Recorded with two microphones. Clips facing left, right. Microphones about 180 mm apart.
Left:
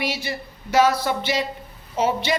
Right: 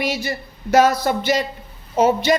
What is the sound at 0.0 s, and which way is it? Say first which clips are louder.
A man's voice: right 4 dB; 45° right (ahead or behind).